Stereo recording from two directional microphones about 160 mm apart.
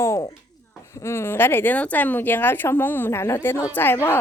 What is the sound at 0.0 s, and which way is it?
Speech, 20° left (ahead or behind).